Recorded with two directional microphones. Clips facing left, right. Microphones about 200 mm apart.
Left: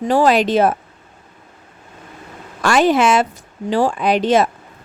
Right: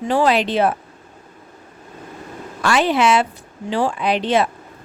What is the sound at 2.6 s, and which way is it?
Speech, 45° left (ahead or behind).